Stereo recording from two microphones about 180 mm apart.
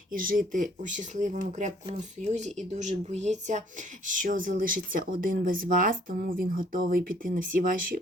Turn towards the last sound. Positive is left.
turn(degrees=-50)  # may be behind; listen again after turning